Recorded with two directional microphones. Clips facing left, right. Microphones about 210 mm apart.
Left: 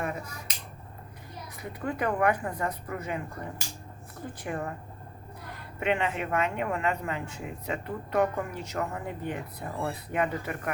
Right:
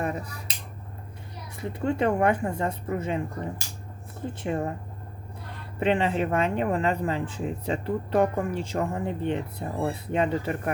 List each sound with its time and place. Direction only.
0.0 s finger snapping: 35° right (ahead or behind)
1.6 s speech: 25° right (ahead or behind)